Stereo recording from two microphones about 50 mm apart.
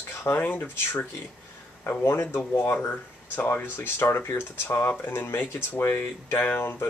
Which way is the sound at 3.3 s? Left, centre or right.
Left.